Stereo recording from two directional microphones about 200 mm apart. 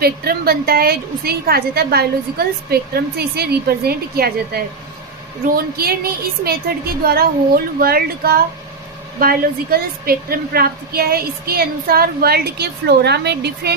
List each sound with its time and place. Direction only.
0.0 s a woman's voice: 50° right (ahead or behind)